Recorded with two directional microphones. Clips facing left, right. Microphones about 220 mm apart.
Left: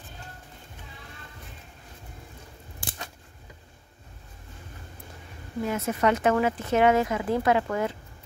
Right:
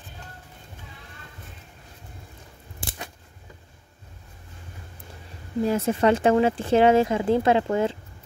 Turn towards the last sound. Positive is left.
turn(degrees=-25)  # may be behind; listen again after turning